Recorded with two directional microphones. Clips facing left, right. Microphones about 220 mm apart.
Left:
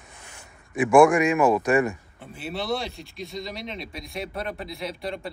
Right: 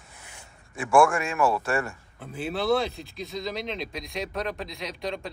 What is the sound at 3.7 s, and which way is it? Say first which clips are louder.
Speech: right 2 dB; 90° right.